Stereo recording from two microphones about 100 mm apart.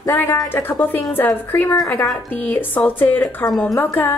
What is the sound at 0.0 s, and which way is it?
Speech, 25° left (ahead or behind).